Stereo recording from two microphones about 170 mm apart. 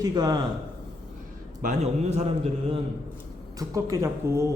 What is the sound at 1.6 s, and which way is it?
A man's voice, 40° right (ahead or behind).